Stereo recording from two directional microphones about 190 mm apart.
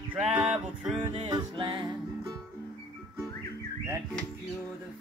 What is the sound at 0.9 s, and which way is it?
Music, 25° right (ahead or behind).